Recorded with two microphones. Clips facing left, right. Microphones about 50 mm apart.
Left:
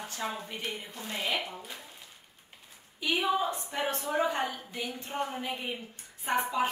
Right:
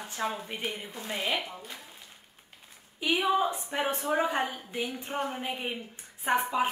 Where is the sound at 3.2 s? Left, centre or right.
Centre.